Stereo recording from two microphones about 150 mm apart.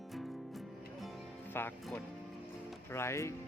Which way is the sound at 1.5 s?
15° left (ahead or behind).